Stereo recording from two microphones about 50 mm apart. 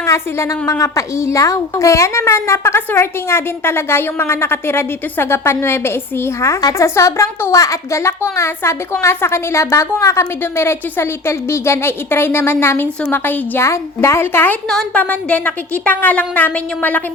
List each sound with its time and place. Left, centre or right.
0.0 s a woman's voice: left
10.6 s a woman's voice: left
13.6 s a woman's voice: left
14.9 s a woman's voice: left